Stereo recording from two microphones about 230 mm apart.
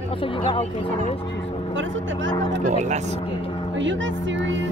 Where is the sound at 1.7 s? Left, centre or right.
Right.